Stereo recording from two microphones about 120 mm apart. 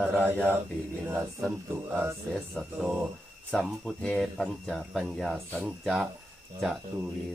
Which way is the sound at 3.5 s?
5° left (ahead or behind).